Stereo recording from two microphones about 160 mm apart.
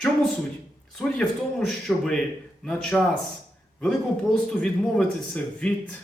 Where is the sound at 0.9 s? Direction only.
5° left (ahead or behind).